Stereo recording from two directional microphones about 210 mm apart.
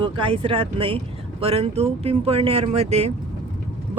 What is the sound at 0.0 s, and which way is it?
Speech, 25° right (ahead or behind).